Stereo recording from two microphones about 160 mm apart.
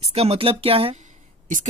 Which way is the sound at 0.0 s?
40° right (ahead or behind).